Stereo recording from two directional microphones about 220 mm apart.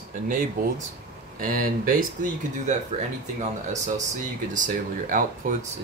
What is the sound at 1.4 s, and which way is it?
Speech, 40° right (ahead or behind).